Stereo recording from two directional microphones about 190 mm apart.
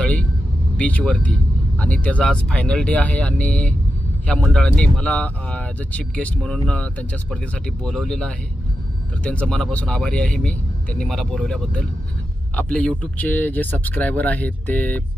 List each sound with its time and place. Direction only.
0.0 s vehicle: 5° left (ahead or behind)
0.7 s speech: 5° left (ahead or behind)